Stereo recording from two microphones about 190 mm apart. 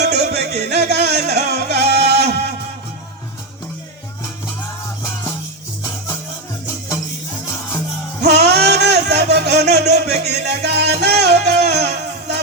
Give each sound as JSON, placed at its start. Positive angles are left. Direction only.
{"t": 0.0, "sound": "music", "side_deg": -60}
{"t": 8.2, "sound": "music", "side_deg": -60}